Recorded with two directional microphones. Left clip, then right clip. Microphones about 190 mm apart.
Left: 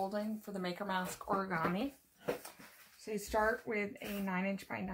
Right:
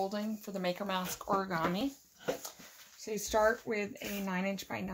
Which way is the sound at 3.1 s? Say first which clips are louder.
Right 4 dB; 40° right (ahead or behind).